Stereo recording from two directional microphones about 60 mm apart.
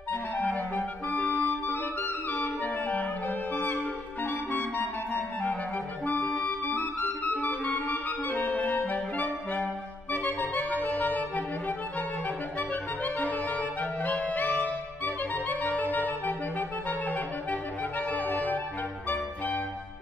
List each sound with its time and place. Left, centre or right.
0.1 s clarinet: left
10.1 s music: left